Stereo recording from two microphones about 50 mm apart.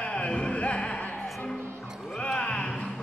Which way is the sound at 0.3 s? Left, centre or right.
Left.